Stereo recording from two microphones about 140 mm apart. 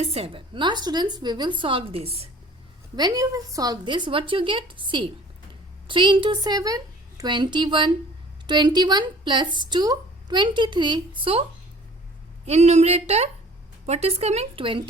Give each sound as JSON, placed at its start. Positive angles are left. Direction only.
{"t": 0.0, "sound": "speech", "side_deg": -45}
{"t": 2.9, "sound": "speech", "side_deg": -30}
{"t": 12.5, "sound": "speech", "side_deg": -50}